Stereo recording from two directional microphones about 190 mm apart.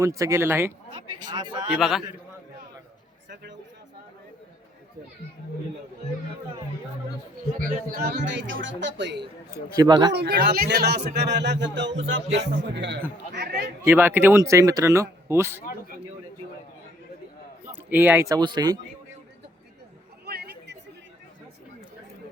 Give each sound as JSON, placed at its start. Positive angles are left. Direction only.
{"t": 0.0, "sound": "speech", "side_deg": -15}
{"t": 1.3, "sound": "speech", "side_deg": -25}
{"t": 1.6, "sound": "a man's voice", "side_deg": 0}
{"t": 7.9, "sound": "speech", "side_deg": -50}
{"t": 9.7, "sound": "speech", "side_deg": -20}
{"t": 10.1, "sound": "speech", "side_deg": -60}
{"t": 13.3, "sound": "speech", "side_deg": -50}
{"t": 13.8, "sound": "speech", "side_deg": -10}
{"t": 17.9, "sound": "speech", "side_deg": -10}
{"t": 20.2, "sound": "chatter", "side_deg": -55}